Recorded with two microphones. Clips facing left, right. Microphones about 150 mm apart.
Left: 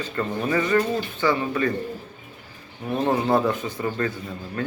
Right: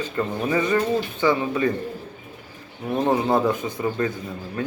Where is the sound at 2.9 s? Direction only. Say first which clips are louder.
Right 1 dB; 20° right (ahead or behind).